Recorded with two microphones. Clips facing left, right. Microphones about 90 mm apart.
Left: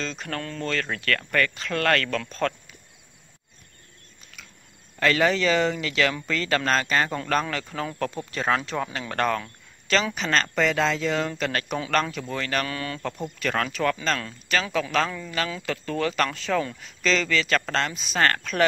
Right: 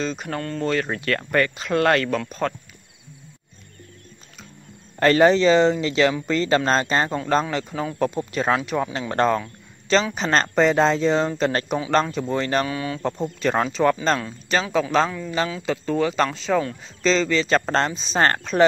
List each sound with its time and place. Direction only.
0.0 s speech: 15° right (ahead or behind)
0.4 s speech: centre (ahead or behind)
0.7 s speech: 20° right (ahead or behind)
4.9 s speech: 35° right (ahead or behind)
7.4 s speech: 10° right (ahead or behind)
9.1 s speech: 25° right (ahead or behind)
12.6 s speech: 10° right (ahead or behind)
13.0 s speech: 25° right (ahead or behind)
15.0 s speech: 10° right (ahead or behind)
15.6 s speech: 20° right (ahead or behind)